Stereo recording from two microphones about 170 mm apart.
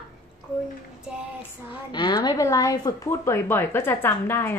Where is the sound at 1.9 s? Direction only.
25° left (ahead or behind).